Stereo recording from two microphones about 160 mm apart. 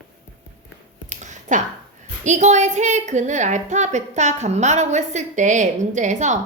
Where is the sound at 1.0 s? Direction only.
50° right (ahead or behind).